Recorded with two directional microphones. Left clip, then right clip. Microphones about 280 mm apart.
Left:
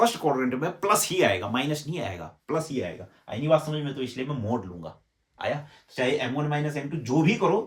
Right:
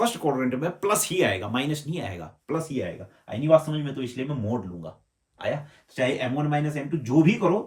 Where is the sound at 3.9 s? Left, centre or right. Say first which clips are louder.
Even; centre.